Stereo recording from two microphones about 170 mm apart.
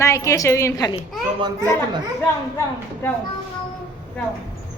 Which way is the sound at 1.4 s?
25° right (ahead or behind).